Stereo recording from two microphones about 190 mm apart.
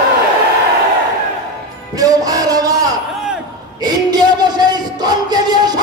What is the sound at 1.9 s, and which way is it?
Music, 20° right (ahead or behind).